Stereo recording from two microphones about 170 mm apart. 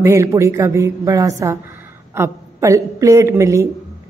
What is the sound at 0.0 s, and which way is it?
A woman's voice, 15° right (ahead or behind).